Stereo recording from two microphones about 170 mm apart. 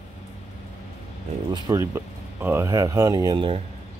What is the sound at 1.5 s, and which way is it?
Speech, 15° right (ahead or behind).